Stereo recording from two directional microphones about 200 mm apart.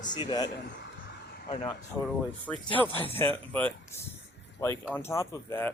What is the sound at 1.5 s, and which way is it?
Speech, 30° left (ahead or behind).